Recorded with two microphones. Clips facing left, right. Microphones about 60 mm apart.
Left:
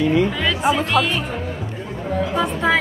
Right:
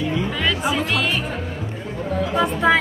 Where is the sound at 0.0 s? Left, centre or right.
Left.